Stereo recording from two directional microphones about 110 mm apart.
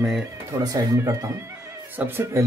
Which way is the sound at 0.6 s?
35° right (ahead or behind).